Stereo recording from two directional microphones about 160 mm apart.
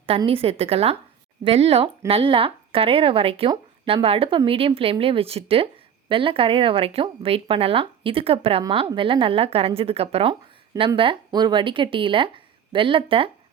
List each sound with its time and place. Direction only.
0.3 s speech: 35° right (ahead or behind)